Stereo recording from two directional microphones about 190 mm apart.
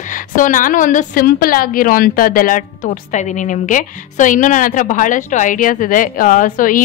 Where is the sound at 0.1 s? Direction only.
45° left (ahead or behind).